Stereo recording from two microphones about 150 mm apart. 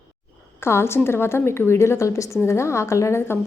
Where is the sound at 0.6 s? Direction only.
15° left (ahead or behind).